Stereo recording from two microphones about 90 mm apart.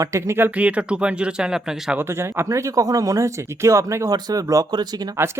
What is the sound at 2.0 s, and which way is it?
Speech, 30° right (ahead or behind).